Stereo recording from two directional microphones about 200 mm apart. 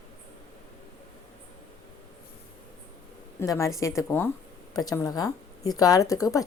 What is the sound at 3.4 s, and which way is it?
Speech, 15° left (ahead or behind).